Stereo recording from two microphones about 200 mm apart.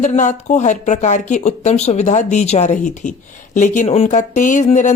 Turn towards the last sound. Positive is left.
turn(degrees=35)  # may be behind; listen again after turning